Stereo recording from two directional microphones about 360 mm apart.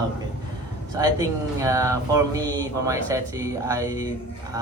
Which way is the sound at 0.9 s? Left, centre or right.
Centre.